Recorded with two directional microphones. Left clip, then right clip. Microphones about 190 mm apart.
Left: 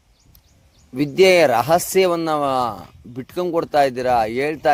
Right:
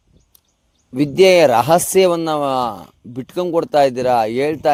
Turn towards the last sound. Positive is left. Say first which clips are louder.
# right 2 dB
turn(degrees=-45)  # may be behind; listen again after turning